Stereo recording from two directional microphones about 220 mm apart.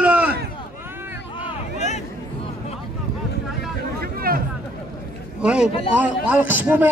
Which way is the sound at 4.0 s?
40° right (ahead or behind).